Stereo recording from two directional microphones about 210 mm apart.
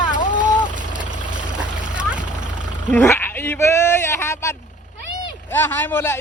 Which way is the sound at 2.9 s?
10° left (ahead or behind).